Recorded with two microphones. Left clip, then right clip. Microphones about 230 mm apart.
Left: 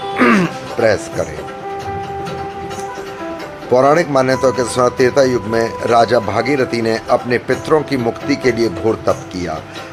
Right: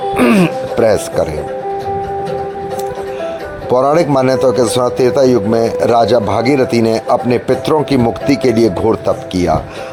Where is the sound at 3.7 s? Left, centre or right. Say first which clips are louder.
Right 1 dB; right.